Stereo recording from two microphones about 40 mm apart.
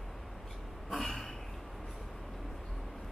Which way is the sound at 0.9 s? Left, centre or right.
Centre.